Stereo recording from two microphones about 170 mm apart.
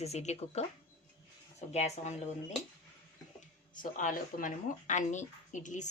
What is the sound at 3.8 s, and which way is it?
Speech, 50° left (ahead or behind).